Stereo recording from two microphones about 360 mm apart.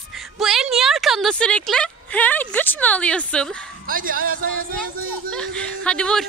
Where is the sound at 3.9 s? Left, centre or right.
Right.